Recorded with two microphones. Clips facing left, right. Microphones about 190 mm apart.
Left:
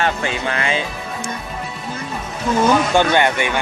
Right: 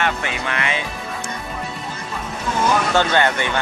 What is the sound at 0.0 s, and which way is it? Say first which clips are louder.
Music: left 3 dB; 30° left (ahead or behind).